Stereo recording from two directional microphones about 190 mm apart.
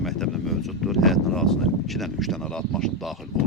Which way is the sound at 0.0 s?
Centre (ahead or behind).